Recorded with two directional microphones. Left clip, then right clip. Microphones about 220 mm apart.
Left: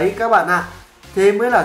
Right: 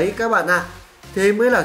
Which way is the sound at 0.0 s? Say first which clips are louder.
Left 3 dB; 30° right (ahead or behind).